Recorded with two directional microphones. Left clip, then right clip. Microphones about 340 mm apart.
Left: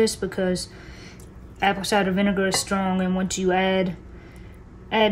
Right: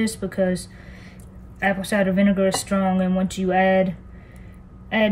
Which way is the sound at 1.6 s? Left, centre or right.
Centre.